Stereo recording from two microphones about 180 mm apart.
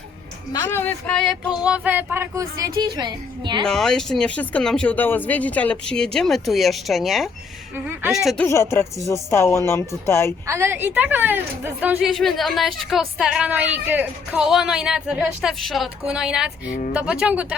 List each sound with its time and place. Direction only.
0.5 s a woman's voice: 20° left (ahead or behind)
0.8 s a woman's voice: 10° left (ahead or behind); by 3.6 s 25° right (ahead or behind)
3.6 s a woman's voice: 5° left (ahead or behind)
8.4 s speech: 15° left (ahead or behind)
10.4 s a woman's voice: 15° right (ahead or behind)